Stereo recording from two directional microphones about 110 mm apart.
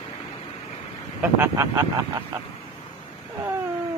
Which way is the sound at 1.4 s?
25° right (ahead or behind).